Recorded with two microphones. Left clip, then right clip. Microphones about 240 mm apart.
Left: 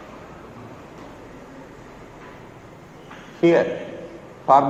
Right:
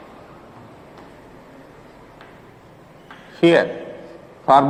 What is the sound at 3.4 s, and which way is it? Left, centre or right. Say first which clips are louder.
A man's voice: right 2 dB; right.